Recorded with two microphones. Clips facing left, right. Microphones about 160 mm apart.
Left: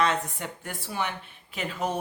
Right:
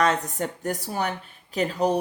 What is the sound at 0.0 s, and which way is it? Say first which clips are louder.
Speech: right 3 dB; 40° right (ahead or behind).